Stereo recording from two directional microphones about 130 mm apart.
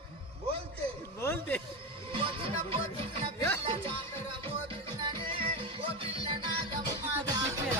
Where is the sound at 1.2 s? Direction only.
15° left (ahead or behind).